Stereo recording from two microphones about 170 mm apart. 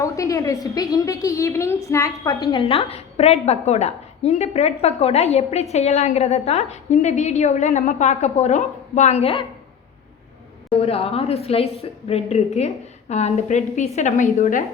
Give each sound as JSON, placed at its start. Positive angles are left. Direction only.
{"t": 0.0, "sound": "a woman's voice", "side_deg": 20}
{"t": 2.6, "sound": "a woman's voice", "side_deg": 35}
{"t": 10.8, "sound": "a woman's voice", "side_deg": 35}